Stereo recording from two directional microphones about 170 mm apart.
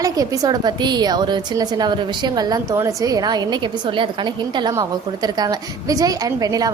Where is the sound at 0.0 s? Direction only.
20° right (ahead or behind).